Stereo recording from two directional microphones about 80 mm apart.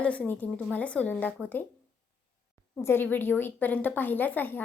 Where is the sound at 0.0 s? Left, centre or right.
Centre.